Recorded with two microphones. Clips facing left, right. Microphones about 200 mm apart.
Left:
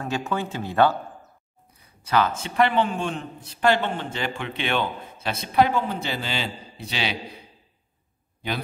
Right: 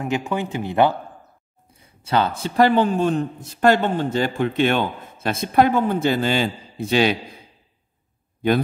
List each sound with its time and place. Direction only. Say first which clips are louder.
0.0 s speech: right 4 dB; 15° right (ahead or behind)
1.8 s a man's voice: right 2 dB; 30° right (ahead or behind); by 7.2 s 50° right (ahead or behind)